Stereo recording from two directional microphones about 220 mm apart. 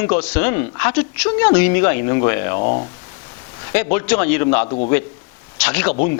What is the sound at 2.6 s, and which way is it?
Speech, 35° left (ahead or behind).